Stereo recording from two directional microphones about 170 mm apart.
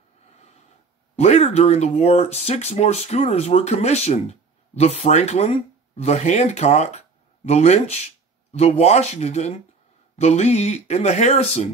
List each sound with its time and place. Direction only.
1.1 s speech: 40° left (ahead or behind)